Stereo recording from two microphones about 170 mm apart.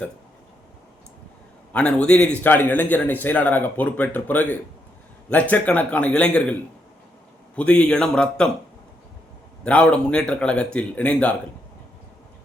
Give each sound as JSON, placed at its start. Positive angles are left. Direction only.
{"t": 1.7, "sound": "a man's voice", "side_deg": 5}
{"t": 9.6, "sound": "a man's voice", "side_deg": 5}